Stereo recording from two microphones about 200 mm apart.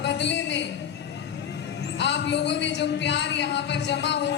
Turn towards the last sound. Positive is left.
turn(degrees=60)  # may be behind; listen again after turning